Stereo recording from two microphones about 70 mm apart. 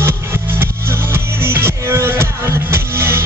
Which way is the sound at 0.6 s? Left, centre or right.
Right.